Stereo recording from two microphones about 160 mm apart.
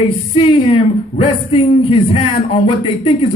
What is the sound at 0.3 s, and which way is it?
Speech, 35° left (ahead or behind).